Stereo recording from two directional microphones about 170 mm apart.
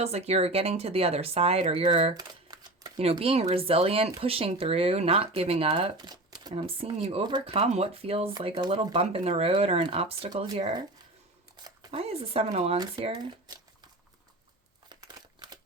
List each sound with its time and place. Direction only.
0.0 s speech: 40° right (ahead or behind)
2.1 s shuffling cards: 25° right (ahead or behind)
3.0 s speech: 35° right (ahead or behind)
11.9 s speech: 35° right (ahead or behind)
12.7 s speech: 25° right (ahead or behind)
14.8 s crumpling: 25° right (ahead or behind)